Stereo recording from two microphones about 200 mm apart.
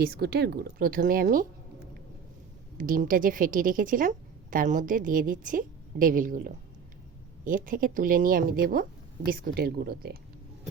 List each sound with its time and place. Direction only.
0.0 s a woman's voice: 50° right (ahead or behind)
2.7 s a woman's voice: 45° right (ahead or behind)